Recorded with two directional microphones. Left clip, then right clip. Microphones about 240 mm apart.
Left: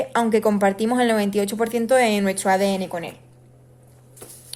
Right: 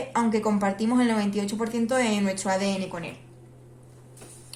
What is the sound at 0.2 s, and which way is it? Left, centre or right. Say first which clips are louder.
Speech: left 6 dB; left.